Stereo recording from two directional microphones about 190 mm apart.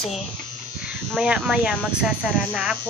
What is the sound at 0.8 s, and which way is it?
Speech, 5° right (ahead or behind).